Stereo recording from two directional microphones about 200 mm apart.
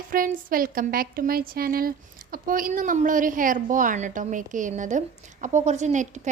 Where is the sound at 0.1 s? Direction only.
45° right (ahead or behind).